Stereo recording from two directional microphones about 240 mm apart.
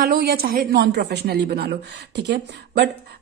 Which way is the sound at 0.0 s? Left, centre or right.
Right.